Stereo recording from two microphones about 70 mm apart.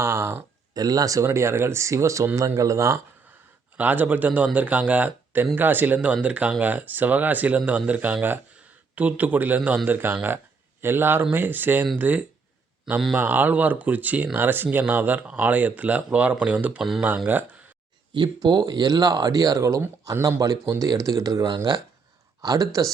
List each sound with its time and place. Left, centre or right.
0.0 s speech: right
0.7 s speech: right
3.8 s speech: right
18.2 s speech: right
22.4 s speech: right